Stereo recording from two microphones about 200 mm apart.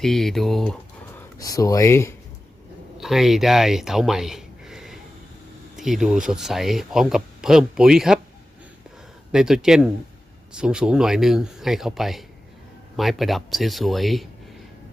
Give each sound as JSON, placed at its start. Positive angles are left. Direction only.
{"t": 0.0, "sound": "speech", "side_deg": 0}
{"t": 1.4, "sound": "speech", "side_deg": 15}
{"t": 3.0, "sound": "speech", "side_deg": 0}
{"t": 9.3, "sound": "speech", "side_deg": -5}